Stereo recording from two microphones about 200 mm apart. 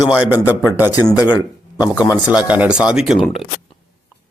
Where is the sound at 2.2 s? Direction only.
5° right (ahead or behind).